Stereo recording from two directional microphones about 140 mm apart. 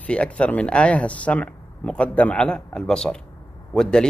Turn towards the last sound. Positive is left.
turn(degrees=5)  # may be behind; listen again after turning